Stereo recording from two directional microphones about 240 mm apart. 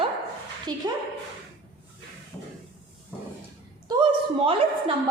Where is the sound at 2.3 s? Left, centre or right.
Centre.